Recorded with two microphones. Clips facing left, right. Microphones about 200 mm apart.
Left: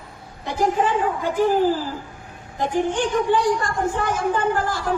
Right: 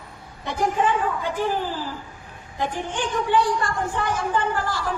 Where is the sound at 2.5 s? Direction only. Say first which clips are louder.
Left 6 dB; 45° left (ahead or behind).